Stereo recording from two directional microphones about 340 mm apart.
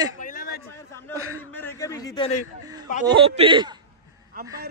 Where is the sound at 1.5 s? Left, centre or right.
Centre.